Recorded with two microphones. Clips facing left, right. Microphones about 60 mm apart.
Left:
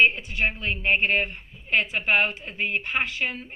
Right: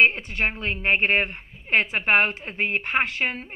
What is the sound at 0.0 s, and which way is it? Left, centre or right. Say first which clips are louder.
A woman's voice: right 1 dB; right.